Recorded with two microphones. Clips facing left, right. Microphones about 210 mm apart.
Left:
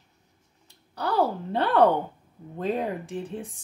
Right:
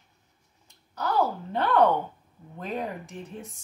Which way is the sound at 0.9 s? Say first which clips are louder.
Left 1 dB; 30° left (ahead or behind).